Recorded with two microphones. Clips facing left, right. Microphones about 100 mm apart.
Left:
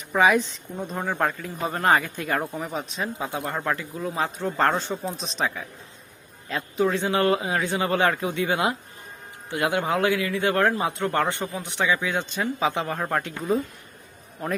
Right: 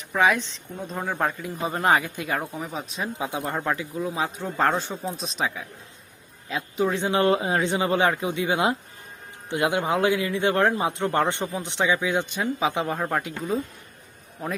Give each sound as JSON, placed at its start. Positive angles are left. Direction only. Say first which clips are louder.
{"t": 0.1, "sound": "speech", "louder": "left 2 dB", "side_deg": 5}
{"t": 3.0, "sound": "speech", "louder": "right 2 dB", "side_deg": -15}
{"t": 6.7, "sound": "a man's voice", "louder": "even", "side_deg": -20}
{"t": 13.0, "sound": "speech", "louder": "even", "side_deg": -5}